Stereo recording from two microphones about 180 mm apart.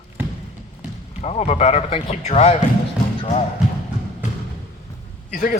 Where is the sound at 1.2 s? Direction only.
35° left (ahead or behind).